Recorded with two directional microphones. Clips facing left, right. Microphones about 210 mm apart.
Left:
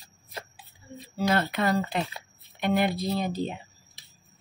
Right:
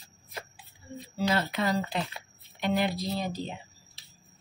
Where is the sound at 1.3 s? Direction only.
55° left (ahead or behind).